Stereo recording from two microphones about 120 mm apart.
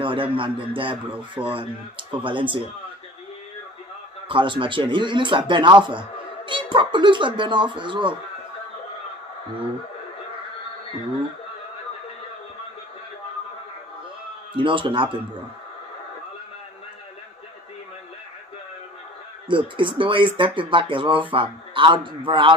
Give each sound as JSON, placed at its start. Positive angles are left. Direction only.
{"t": 0.0, "sound": "a man's voice", "side_deg": -45}
{"t": 4.3, "sound": "a man's voice", "side_deg": -45}
{"t": 14.5, "sound": "a man's voice", "side_deg": -45}
{"t": 19.4, "sound": "a man's voice", "side_deg": -45}